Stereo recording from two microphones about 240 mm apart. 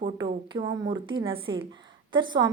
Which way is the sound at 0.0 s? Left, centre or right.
Centre.